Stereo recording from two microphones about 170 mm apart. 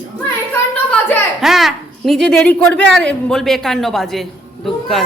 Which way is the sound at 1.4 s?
Centre (ahead or behind).